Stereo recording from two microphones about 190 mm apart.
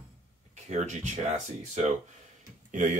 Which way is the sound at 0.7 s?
40° right (ahead or behind).